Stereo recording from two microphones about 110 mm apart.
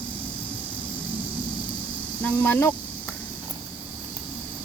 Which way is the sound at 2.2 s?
20° left (ahead or behind).